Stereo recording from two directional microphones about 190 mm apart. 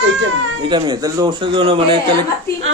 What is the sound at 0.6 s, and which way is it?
Speech, 25° right (ahead or behind).